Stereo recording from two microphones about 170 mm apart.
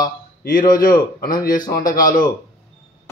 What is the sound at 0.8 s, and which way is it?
A man's voice, 55° left (ahead or behind).